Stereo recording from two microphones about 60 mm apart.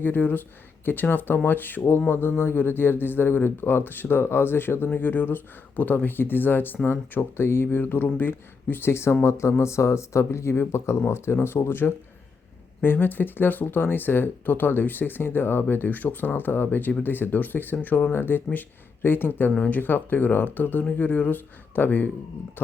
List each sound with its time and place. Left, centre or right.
0.0 s speech: left
19.5 s speech: left
19.8 s speech: left